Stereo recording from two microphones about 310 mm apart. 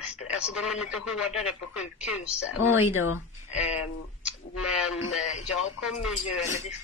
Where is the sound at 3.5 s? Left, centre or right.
Left.